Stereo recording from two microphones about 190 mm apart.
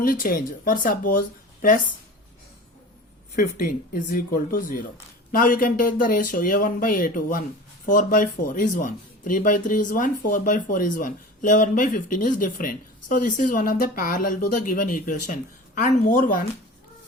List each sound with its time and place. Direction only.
0.0 s speech: 50° left (ahead or behind)
3.3 s speech: 45° left (ahead or behind)